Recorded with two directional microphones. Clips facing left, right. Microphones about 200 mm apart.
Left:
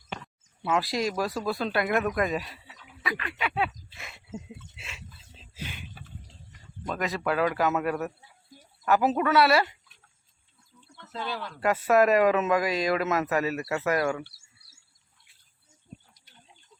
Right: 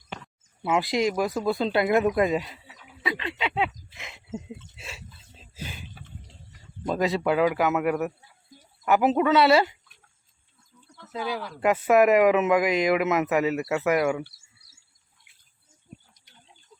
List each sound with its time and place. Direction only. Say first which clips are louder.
0.6 s speech: right 3 dB; 20° right (ahead or behind)
3.0 s a sound: right 3 dB; 25° right (ahead or behind)
4.8 s a sound: right 4 dB; 35° right (ahead or behind)
6.8 s speech: right 5 dB; 30° right (ahead or behind)
7.3 s speech: right 3 dB; 15° right (ahead or behind)
11.2 s speech: right 3 dB; 5° right (ahead or behind)